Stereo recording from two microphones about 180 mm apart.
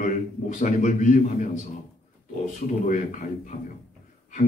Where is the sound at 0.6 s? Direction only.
45° left (ahead or behind).